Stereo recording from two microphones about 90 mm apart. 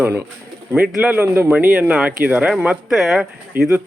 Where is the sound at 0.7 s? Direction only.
10° right (ahead or behind).